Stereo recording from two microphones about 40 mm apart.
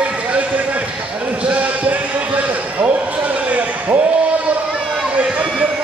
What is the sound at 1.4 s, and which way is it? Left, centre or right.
Basketball bounce, right.